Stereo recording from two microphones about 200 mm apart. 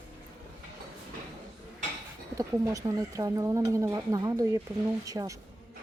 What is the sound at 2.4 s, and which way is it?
Speech, 15° right (ahead or behind).